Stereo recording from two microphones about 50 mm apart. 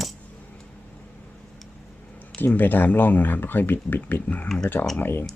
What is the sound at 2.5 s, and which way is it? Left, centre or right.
Speech, left.